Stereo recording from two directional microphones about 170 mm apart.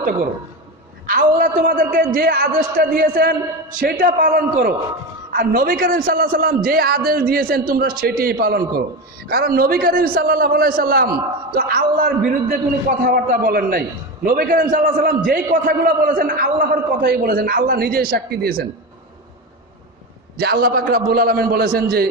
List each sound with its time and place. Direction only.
1.0 s a man's voice: 55° right (ahead or behind)
20.3 s a man's voice: 65° right (ahead or behind)